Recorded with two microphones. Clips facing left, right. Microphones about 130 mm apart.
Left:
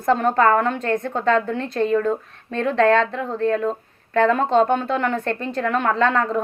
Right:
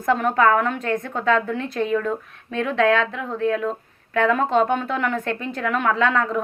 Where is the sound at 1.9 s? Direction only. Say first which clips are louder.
Left 3 dB; 30° left (ahead or behind).